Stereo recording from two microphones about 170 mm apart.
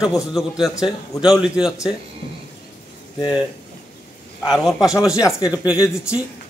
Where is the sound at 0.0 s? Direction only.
Centre (ahead or behind).